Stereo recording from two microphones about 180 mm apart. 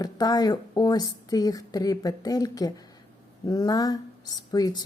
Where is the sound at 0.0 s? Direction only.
20° left (ahead or behind).